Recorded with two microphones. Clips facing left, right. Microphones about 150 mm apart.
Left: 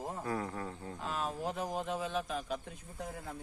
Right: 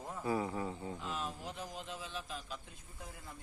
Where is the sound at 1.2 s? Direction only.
50° left (ahead or behind).